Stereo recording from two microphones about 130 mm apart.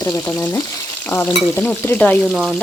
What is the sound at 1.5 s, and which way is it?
Speech, 15° left (ahead or behind).